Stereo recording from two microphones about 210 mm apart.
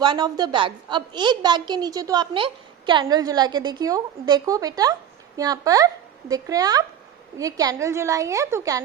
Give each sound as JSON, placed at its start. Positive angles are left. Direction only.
{"t": 0.0, "sound": "a woman's voice", "side_deg": -20}